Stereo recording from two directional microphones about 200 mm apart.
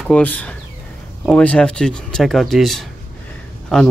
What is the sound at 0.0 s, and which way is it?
Speech, 5° left (ahead or behind).